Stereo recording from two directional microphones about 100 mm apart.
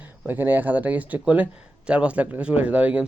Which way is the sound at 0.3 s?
20° right (ahead or behind).